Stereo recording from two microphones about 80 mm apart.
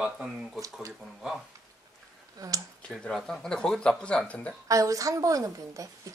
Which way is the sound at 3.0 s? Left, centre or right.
Centre.